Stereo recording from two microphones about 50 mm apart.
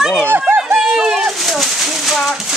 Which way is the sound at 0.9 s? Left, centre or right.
Centre.